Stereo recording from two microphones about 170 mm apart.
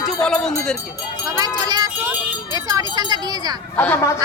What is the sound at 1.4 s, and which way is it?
Speech, 25° right (ahead or behind).